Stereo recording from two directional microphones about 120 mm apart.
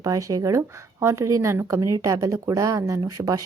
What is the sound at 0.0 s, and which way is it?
Speech, 30° right (ahead or behind).